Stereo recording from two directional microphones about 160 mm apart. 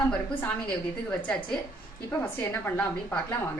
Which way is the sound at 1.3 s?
5° left (ahead or behind).